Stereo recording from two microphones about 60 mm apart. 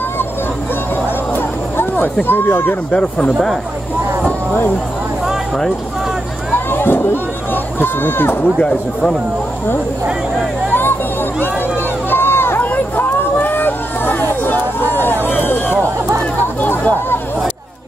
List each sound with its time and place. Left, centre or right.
1.3 s a sound: left
2.2 s speech: left
2.9 s speech: left
6.5 s run: left
10.7 s music: left
12.1 s a sound: left